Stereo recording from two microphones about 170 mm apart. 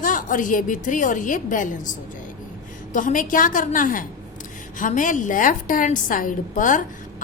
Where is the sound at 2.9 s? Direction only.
50° left (ahead or behind).